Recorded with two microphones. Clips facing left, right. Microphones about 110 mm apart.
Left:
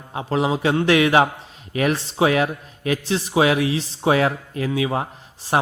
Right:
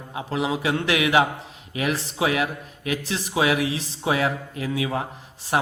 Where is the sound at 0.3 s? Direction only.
35° left (ahead or behind).